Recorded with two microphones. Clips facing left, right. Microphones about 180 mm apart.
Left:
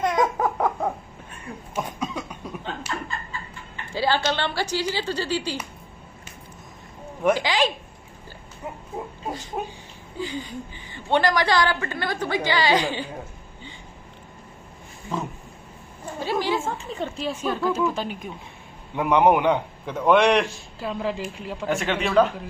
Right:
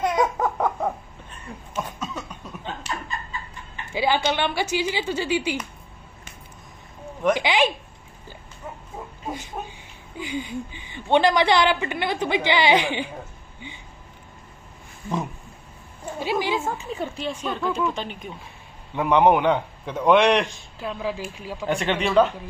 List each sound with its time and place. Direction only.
0.0 s a sound: centre (ahead or behind)
1.3 s cough: 10° left (ahead or behind)
3.9 s a woman's voice: 15° right (ahead or behind)
7.3 s a sound: 20° right (ahead or behind)
9.6 s a man's voice: 15° left (ahead or behind)
10.1 s a woman's voice: 15° right (ahead or behind)
16.2 s a sound: 15° right (ahead or behind)
17.3 s a man's voice: 5° left (ahead or behind)
21.0 s speech: 5° right (ahead or behind)